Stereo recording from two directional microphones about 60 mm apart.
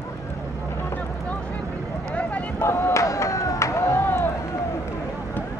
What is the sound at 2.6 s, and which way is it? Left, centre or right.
Run, left.